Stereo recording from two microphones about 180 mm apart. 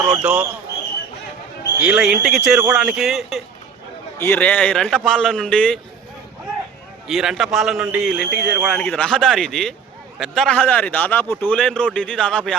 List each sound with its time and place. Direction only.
0.1 s a man's voice: 5° right (ahead or behind)
1.8 s a man's voice: 5° right (ahead or behind)
4.2 s a man's voice: 10° left (ahead or behind)
7.1 s a man's voice: centre (ahead or behind)